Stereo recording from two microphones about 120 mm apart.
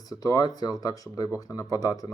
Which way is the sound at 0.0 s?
30° left (ahead or behind).